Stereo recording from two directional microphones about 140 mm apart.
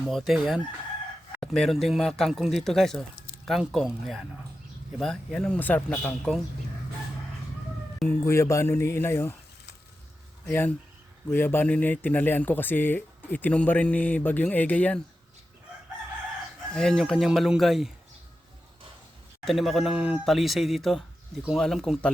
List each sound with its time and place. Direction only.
0.1 s speech: centre (ahead or behind)
8.0 s speech: 15° left (ahead or behind)
10.4 s speech: 15° left (ahead or behind)
16.7 s speech: centre (ahead or behind)
19.5 s speech: centre (ahead or behind)